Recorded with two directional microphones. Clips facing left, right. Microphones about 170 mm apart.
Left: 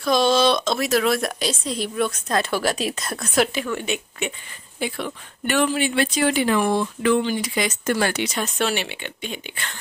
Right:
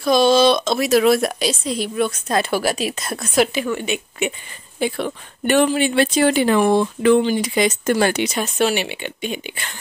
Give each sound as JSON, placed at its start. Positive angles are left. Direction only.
{"t": 0.0, "sound": "a woman's voice", "side_deg": -5}
{"t": 4.7, "sound": "speech", "side_deg": -30}